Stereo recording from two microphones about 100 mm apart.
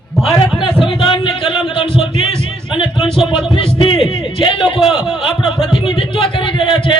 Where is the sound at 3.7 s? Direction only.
60° left (ahead or behind).